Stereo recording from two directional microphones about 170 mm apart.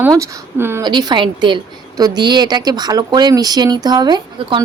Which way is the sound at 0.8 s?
25° right (ahead or behind).